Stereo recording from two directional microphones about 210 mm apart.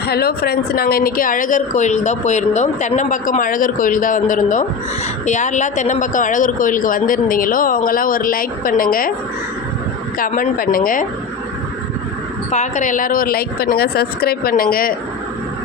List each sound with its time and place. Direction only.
0.1 s a woman's voice: 45° left (ahead or behind)
10.2 s a woman's voice: 40° left (ahead or behind)
12.5 s a woman's voice: 35° left (ahead or behind)